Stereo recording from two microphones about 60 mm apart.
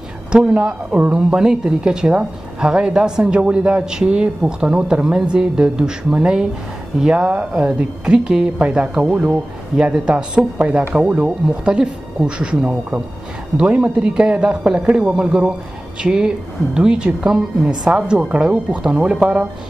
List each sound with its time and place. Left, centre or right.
0.3 s a woman's voice: centre
1.3 s a woman's voice: centre